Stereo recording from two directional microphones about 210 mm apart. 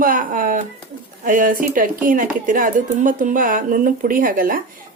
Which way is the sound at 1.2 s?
40° right (ahead or behind).